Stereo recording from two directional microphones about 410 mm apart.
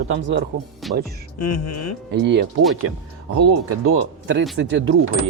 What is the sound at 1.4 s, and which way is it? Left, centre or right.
Speech, left.